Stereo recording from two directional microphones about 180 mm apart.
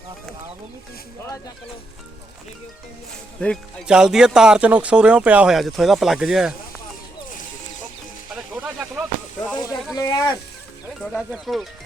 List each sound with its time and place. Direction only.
3.4 s speech: 5° left (ahead or behind)
3.8 s speech: 5° right (ahead or behind)
8.6 s a sound: 5° right (ahead or behind)
9.6 s speech: 20° left (ahead or behind)
11.0 s speech: centre (ahead or behind)